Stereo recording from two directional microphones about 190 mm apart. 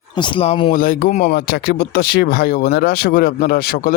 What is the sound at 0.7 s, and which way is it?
Speech, 50° left (ahead or behind).